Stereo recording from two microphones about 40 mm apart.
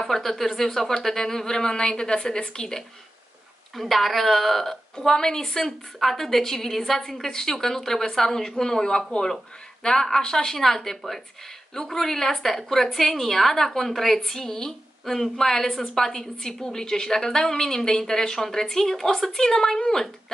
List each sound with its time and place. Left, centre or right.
0.0 s a woman's voice: centre
3.7 s a woman's voice: centre
4.9 s a woman's voice: centre